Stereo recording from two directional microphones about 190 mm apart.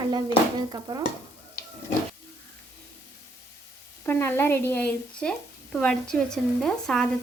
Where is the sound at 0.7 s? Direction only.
20° right (ahead or behind).